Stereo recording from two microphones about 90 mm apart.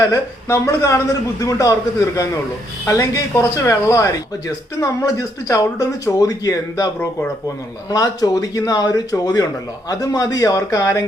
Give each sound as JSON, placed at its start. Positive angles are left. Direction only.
{"t": 0.0, "sound": "speech", "side_deg": 35}
{"t": 2.8, "sound": "speech", "side_deg": 35}
{"t": 7.9, "sound": "a man's voice", "side_deg": 45}